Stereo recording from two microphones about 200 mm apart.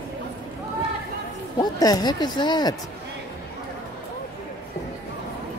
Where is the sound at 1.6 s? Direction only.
20° left (ahead or behind).